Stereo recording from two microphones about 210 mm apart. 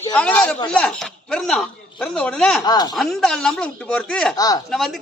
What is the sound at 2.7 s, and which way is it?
Speech, 20° left (ahead or behind).